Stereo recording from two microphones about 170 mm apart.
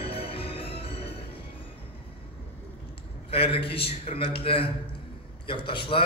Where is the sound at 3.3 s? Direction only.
35° left (ahead or behind).